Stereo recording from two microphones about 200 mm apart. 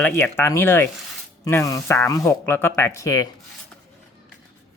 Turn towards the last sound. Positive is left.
turn(degrees=15)  # may be behind; listen again after turning